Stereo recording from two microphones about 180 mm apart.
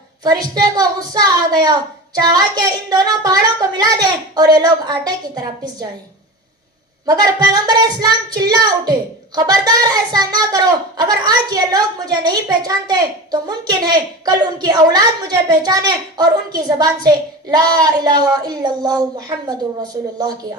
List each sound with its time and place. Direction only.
0.6 s speech: 20° right (ahead or behind)
7.0 s speech: 20° right (ahead or behind)